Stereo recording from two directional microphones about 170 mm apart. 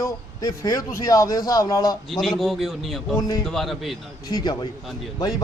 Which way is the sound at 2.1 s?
Centre (ahead or behind).